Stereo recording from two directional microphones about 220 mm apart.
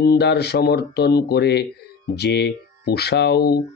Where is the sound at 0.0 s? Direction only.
50° left (ahead or behind).